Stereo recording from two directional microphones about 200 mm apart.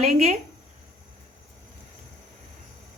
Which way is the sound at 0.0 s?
30° right (ahead or behind).